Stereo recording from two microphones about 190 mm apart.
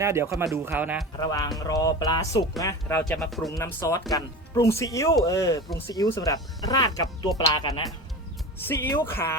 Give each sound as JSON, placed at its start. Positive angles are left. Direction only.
{"t": 0.0, "sound": "speech", "side_deg": -15}
{"t": 1.1, "sound": "speech", "side_deg": 20}
{"t": 3.0, "sound": "speech", "side_deg": 0}
{"t": 3.6, "sound": "speech", "side_deg": 15}
{"t": 8.5, "sound": "speech", "side_deg": 10}